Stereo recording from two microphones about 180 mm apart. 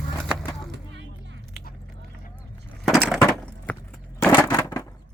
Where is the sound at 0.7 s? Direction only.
80° right.